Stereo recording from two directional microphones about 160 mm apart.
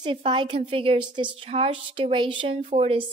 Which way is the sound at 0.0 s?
30° right (ahead or behind).